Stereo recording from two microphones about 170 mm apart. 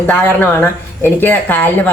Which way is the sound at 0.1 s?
10° left (ahead or behind).